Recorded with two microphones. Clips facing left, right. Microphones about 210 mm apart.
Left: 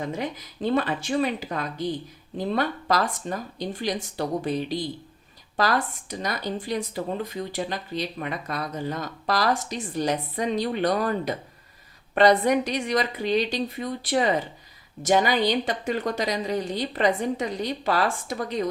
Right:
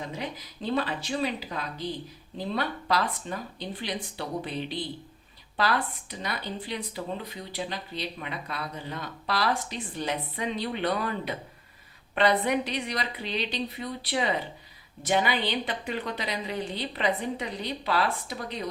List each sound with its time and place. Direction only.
0.2 s speech: 50° left (ahead or behind)